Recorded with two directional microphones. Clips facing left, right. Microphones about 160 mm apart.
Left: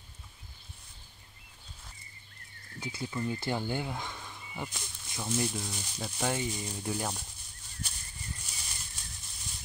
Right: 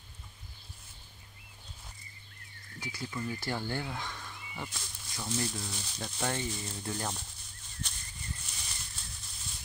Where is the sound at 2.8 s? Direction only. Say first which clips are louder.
Left 3 dB; 20° left (ahead or behind).